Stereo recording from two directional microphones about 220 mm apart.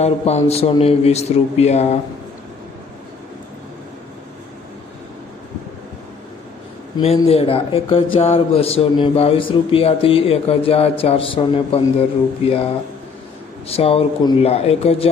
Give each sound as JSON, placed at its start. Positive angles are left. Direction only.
{"t": 0.0, "sound": "speech", "side_deg": 30}
{"t": 6.9, "sound": "speech", "side_deg": 25}
{"t": 13.7, "sound": "speech", "side_deg": 25}